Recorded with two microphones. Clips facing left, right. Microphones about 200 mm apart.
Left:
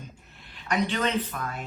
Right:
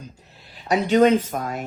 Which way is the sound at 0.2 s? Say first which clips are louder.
Right 4 dB; 35° right (ahead or behind).